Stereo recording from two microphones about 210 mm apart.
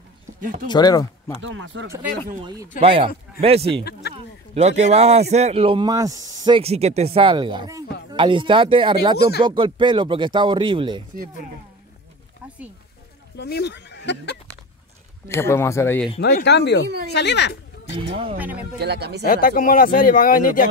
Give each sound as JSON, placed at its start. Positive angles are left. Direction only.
{"t": 0.4, "sound": "speech", "side_deg": -40}
{"t": 0.7, "sound": "speech", "side_deg": 20}
{"t": 1.4, "sound": "speech", "side_deg": -65}
{"t": 2.4, "sound": "a man's voice", "side_deg": -15}
{"t": 13.4, "sound": "speech", "side_deg": 55}
{"t": 15.2, "sound": "speech", "side_deg": 10}
{"t": 16.2, "sound": "speech", "side_deg": 50}
{"t": 17.9, "sound": "speech", "side_deg": -25}
{"t": 18.8, "sound": "speech", "side_deg": -50}
{"t": 19.2, "sound": "speech", "side_deg": 40}